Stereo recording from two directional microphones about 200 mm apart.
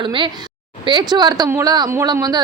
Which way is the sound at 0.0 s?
25° right (ahead or behind).